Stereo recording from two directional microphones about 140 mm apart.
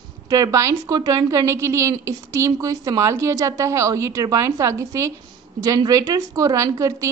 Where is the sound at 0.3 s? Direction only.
25° right (ahead or behind).